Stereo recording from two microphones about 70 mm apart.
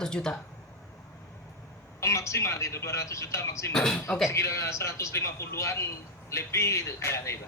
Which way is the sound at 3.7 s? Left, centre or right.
Centre.